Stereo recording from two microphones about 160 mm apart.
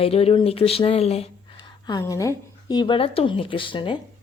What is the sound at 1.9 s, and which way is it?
Speech, 20° left (ahead or behind).